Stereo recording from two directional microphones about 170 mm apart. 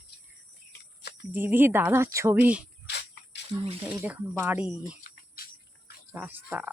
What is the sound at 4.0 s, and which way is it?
Speech, 10° right (ahead or behind).